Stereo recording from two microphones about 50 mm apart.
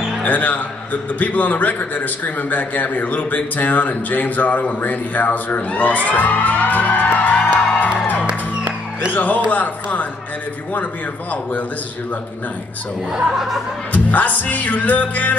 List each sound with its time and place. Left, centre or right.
0.2 s a man's voice: left
7.4 s music: left
8.3 s music: centre
9.1 s a man's voice: left
13.1 s speech: centre
13.9 s a man's voice: left